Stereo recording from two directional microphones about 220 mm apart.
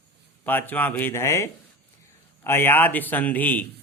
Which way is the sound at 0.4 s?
10° left (ahead or behind).